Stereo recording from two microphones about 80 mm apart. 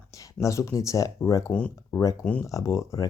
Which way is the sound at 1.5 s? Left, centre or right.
Centre.